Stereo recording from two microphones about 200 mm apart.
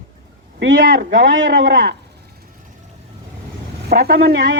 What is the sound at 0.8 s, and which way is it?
Speech, 45° right (ahead or behind).